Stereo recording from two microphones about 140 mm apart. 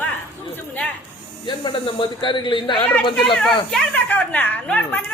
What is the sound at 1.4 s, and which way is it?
Speech, 35° left (ahead or behind).